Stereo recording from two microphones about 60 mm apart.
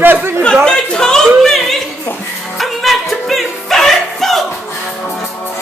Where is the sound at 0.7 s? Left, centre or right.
Centre.